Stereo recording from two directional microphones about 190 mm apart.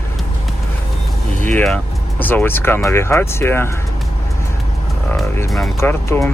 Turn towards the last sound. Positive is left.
turn(degrees=15)  # may be behind; listen again after turning